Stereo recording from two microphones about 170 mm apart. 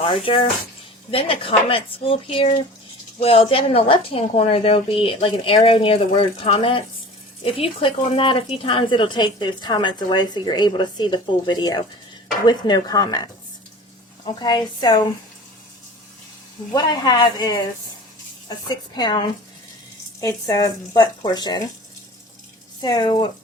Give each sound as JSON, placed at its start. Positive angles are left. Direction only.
{"t": 0.0, "sound": "a woman's voice", "side_deg": 30}
{"t": 16.7, "sound": "a woman's voice", "side_deg": 25}
{"t": 20.2, "sound": "a woman's voice", "side_deg": 20}
{"t": 22.8, "sound": "a woman's voice", "side_deg": 25}